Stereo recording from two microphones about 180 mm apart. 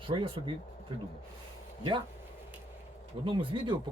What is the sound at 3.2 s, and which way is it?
Speech, 30° right (ahead or behind).